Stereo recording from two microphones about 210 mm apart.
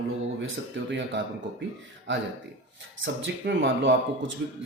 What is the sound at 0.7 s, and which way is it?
Speech, 60° right (ahead or behind).